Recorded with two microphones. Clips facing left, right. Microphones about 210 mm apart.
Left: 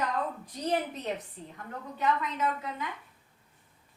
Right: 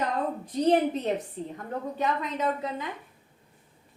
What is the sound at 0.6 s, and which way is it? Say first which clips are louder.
A woman's voice: right 8 dB; 30° right (ahead or behind).